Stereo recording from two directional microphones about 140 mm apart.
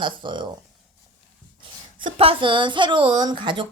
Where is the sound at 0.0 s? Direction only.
35° right (ahead or behind).